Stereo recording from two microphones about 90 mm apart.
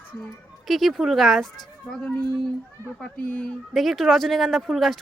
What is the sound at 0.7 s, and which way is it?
Speech, centre (ahead or behind).